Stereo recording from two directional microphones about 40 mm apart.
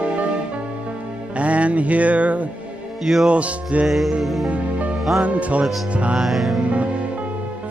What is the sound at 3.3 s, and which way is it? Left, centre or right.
Music, right.